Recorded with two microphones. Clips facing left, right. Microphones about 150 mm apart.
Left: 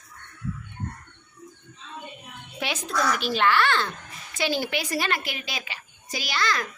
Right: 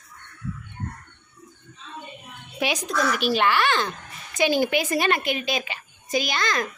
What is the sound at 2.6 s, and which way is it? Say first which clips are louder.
A child's voice: right 3 dB; 15° right (ahead or behind).